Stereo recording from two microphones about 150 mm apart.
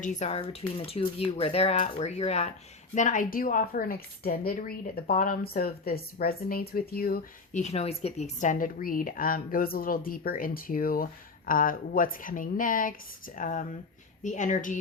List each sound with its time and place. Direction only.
0.0 s speech: 55° left (ahead or behind)
2.9 s a woman's voice: 60° left (ahead or behind); by 7.3 s 80° left
7.5 s a woman's voice: 50° left (ahead or behind)